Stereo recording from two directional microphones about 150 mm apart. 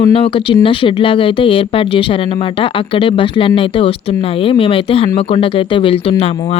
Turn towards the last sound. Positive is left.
turn(degrees=40)  # may be behind; listen again after turning